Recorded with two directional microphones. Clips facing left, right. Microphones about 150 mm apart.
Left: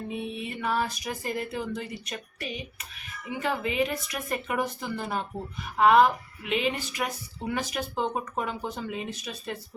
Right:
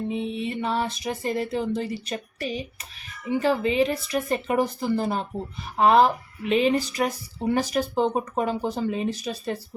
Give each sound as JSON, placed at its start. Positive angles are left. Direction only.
{"t": 0.1, "sound": "music", "side_deg": -25}
{"t": 3.2, "sound": "speech", "side_deg": -30}